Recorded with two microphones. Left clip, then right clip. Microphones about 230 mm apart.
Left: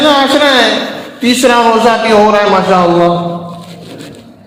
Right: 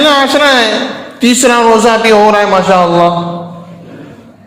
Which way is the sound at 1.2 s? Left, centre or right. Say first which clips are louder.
Even; right.